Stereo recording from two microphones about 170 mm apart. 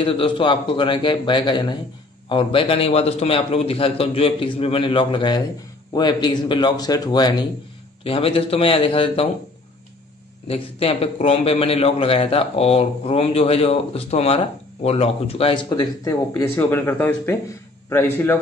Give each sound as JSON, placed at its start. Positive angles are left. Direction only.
{"t": 0.0, "sound": "a man's voice", "side_deg": 30}
{"t": 10.5, "sound": "a man's voice", "side_deg": 35}